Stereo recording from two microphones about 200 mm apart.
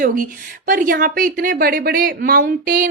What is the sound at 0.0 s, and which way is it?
A woman's voice, 45° right (ahead or behind).